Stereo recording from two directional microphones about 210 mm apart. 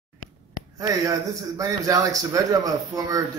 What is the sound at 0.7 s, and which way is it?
A man's voice, 15° right (ahead or behind).